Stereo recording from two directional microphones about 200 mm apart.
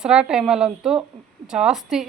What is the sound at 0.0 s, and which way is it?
Speech, 5° right (ahead or behind).